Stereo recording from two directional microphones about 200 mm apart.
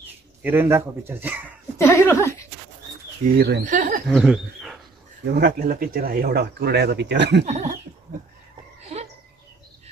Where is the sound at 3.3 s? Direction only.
50° right (ahead or behind).